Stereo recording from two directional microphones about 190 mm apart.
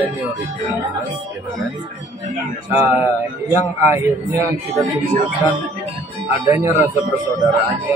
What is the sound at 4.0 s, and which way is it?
Speech, 15° right (ahead or behind).